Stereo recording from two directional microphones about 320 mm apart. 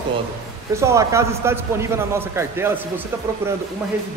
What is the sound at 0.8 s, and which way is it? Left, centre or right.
A man's voice, centre.